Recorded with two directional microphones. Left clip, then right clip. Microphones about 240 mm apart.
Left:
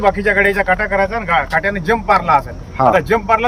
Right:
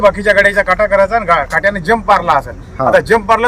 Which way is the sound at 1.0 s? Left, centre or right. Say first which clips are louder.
Right 5 dB; right.